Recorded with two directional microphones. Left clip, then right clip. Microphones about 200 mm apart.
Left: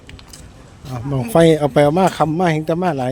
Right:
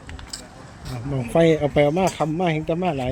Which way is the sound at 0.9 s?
40° left (ahead or behind).